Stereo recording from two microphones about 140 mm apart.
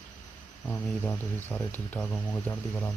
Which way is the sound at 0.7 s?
15° left (ahead or behind).